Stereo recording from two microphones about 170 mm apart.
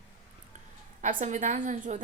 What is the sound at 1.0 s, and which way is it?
Speech, 45° right (ahead or behind).